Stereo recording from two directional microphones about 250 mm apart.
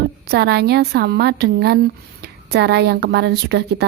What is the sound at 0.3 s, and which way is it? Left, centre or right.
A woman's voice, right.